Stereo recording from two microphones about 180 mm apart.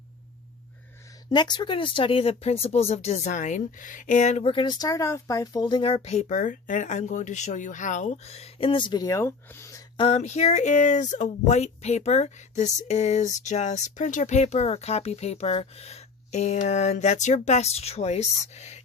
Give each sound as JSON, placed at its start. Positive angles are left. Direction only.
{"t": 1.3, "sound": "speech", "side_deg": 25}
{"t": 10.0, "sound": "speech", "side_deg": 35}